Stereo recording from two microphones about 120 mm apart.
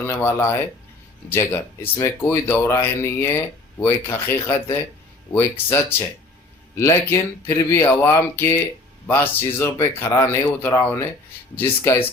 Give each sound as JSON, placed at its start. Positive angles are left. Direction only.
{"t": 0.0, "sound": "speech", "side_deg": 20}